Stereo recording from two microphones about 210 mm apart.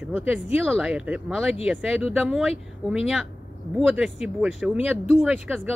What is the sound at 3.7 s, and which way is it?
A woman's voice, 5° right (ahead or behind).